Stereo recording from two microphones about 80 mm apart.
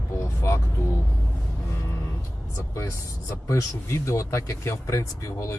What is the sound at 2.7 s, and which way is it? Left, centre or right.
Speech, left.